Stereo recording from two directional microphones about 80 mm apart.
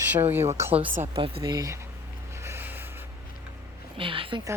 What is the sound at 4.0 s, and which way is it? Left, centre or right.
Speech, right.